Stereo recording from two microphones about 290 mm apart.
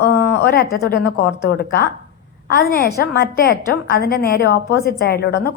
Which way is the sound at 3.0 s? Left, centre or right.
Left.